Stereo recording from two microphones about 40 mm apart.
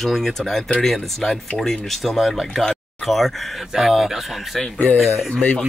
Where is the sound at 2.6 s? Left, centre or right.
Centre.